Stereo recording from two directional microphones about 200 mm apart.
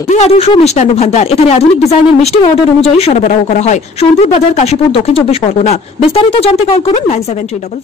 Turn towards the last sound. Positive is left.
turn(degrees=30)  # may be behind; listen again after turning